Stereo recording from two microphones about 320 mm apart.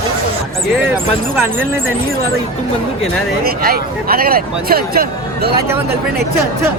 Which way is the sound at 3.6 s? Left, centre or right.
Right.